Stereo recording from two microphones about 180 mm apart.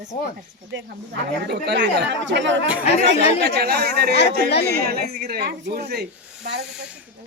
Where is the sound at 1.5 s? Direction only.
70° right (ahead or behind).